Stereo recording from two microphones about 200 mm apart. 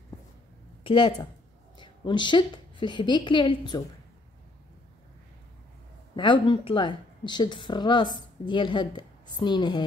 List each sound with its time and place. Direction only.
0.8 s a woman's voice: 25° left (ahead or behind)
6.1 s a woman's voice: 25° left (ahead or behind)